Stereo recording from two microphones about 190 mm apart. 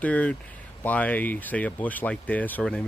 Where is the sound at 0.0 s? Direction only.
5° left (ahead or behind).